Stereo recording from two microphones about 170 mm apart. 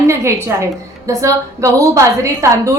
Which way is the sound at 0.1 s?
15° right (ahead or behind).